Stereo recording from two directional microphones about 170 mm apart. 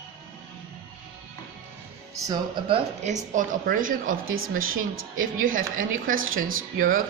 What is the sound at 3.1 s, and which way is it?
A woman's voice, 50° right (ahead or behind).